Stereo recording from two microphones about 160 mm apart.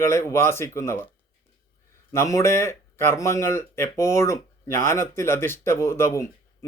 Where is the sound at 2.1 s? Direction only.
20° left (ahead or behind).